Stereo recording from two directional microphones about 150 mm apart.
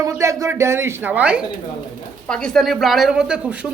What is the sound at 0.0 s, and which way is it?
Speech, 20° right (ahead or behind).